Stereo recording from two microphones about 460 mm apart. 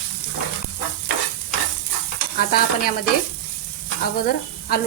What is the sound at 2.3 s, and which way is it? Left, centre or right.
Speech, centre.